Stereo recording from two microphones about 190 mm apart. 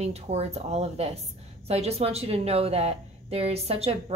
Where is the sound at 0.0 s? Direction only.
35° right (ahead or behind).